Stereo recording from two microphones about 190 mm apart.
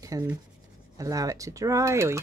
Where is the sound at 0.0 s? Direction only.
15° right (ahead or behind).